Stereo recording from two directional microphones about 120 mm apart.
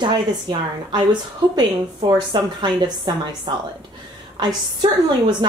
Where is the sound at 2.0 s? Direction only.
40° right (ahead or behind).